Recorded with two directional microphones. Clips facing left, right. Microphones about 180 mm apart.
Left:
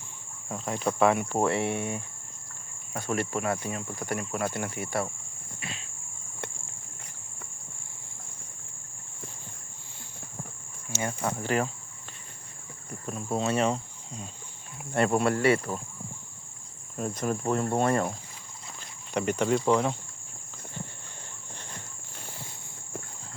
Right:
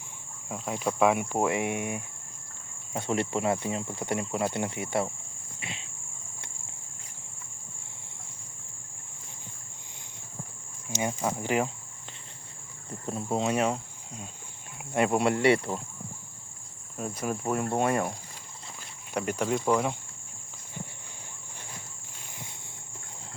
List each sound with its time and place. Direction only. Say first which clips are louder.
0.4 s speech: left 1 dB; 5° right (ahead or behind); by 5.1 s 20° right (ahead or behind)
5.5 s cricket: left 1 dB; 20° right (ahead or behind)
10.9 s speech: right 1 dB; 15° right (ahead or behind)
13.2 s speech: even; 15° right (ahead or behind)
17.0 s speech: left 2 dB; 5° right (ahead or behind)
19.1 s speech: left 3 dB; 5° right (ahead or behind)